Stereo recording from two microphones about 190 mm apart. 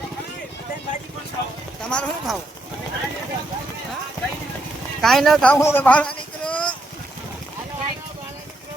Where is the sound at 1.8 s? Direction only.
5° left (ahead or behind).